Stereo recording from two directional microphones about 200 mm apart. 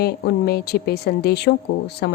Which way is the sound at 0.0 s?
55° left (ahead or behind).